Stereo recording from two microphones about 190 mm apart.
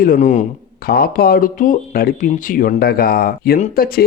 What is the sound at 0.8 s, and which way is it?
Speech, 55° left (ahead or behind).